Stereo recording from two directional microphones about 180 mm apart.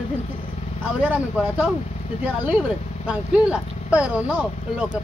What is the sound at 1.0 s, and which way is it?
Speech, 10° right (ahead or behind).